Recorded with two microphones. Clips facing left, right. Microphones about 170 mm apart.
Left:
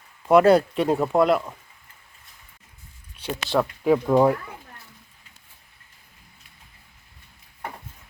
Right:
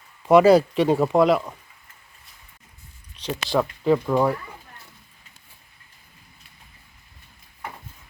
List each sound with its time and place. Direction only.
0.2 s speech: centre (ahead or behind)
3.5 s speech: 5° left (ahead or behind)
4.0 s speech: 15° left (ahead or behind)